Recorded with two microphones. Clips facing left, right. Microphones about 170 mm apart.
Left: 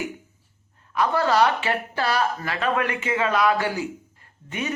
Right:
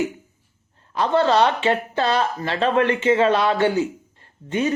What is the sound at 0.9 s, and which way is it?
Speech, 30° right (ahead or behind).